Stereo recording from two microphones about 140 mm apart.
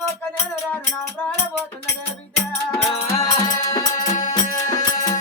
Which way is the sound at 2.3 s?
50° left (ahead or behind).